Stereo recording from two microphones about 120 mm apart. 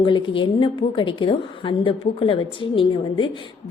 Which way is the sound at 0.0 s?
45° left (ahead or behind).